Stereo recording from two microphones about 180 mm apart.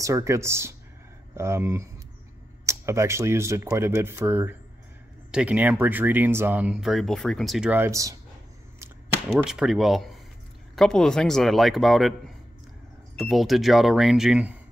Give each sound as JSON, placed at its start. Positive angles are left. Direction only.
{"t": 0.0, "sound": "speech", "side_deg": -15}
{"t": 9.3, "sound": "speech", "side_deg": -5}
{"t": 13.2, "sound": "speech", "side_deg": 0}